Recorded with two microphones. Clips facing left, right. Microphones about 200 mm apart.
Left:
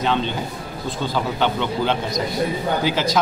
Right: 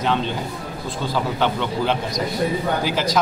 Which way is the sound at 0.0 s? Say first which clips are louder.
Even; 5° right (ahead or behind).